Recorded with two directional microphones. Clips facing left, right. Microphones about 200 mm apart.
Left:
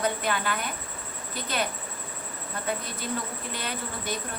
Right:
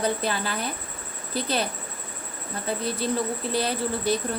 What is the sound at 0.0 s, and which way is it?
A woman's voice, 35° right (ahead or behind).